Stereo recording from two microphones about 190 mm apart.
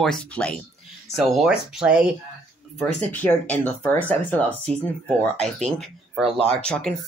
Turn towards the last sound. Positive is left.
turn(degrees=5)  # may be behind; listen again after turning